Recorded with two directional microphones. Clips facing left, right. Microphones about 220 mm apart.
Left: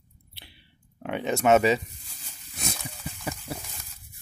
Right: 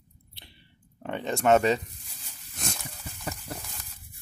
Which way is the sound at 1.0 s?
5° left (ahead or behind).